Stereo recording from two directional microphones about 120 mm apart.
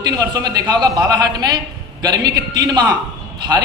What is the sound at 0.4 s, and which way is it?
A man's voice, 35° right (ahead or behind).